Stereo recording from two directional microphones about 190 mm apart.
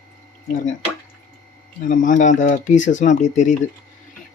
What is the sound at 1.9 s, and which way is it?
Speech, 45° left (ahead or behind).